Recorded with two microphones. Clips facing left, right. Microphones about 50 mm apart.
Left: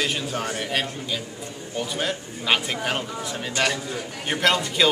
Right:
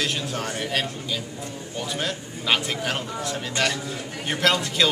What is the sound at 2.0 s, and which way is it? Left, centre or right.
A man's voice, centre.